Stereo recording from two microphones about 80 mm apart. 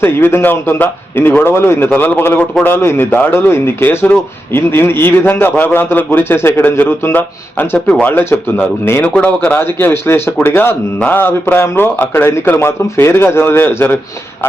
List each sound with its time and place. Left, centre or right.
0.0 s a man's voice: left
4.0 s a man's voice: centre
9.0 s a man's voice: centre